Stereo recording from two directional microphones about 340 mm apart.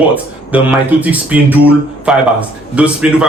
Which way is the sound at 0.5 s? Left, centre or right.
Centre.